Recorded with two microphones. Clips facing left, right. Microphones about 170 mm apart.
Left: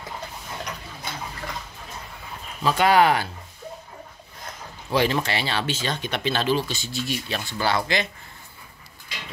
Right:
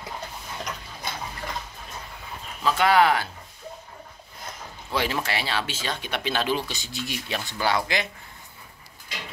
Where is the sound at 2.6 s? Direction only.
15° left (ahead or behind).